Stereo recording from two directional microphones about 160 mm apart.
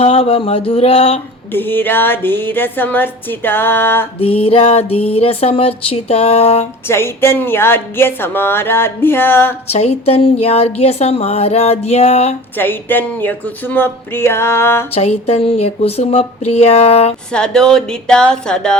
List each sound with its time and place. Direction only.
0.0 s speech: 35° left (ahead or behind)
1.5 s a woman's voice: 10° left (ahead or behind)
4.2 s speech: 35° left (ahead or behind)
6.8 s a woman's voice: 15° left (ahead or behind)
9.7 s speech: 40° left (ahead or behind)
12.5 s a woman's voice: 15° left (ahead or behind)
14.9 s speech: 40° left (ahead or behind)
17.3 s speech: 5° left (ahead or behind)